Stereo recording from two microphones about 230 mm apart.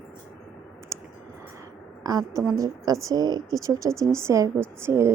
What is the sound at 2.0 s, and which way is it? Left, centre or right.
A woman's voice, centre.